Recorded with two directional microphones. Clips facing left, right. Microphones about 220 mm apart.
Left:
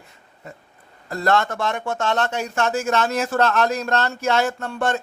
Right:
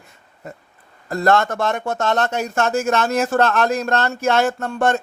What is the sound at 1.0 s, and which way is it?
Speech, 45° right (ahead or behind).